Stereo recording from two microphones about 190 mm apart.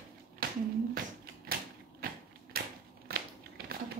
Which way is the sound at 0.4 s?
50° right (ahead or behind).